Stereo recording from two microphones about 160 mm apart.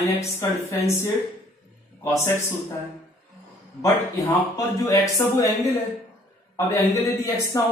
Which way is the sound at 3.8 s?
15° left (ahead or behind).